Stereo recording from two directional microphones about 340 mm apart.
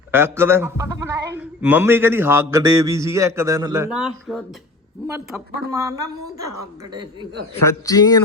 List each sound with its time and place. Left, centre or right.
0.1 s a man's voice: centre
6.9 s a man's voice: centre
7.6 s a man's voice: centre